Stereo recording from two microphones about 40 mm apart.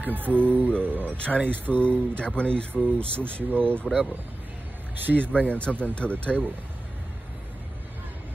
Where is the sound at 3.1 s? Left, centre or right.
Right.